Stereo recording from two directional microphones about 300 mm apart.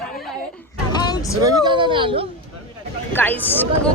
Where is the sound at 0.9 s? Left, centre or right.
Centre.